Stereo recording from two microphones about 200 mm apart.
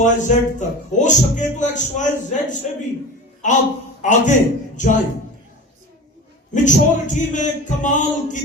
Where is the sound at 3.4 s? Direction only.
40° left (ahead or behind).